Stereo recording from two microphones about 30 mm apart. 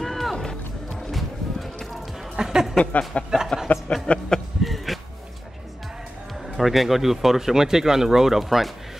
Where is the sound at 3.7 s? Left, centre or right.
Centre.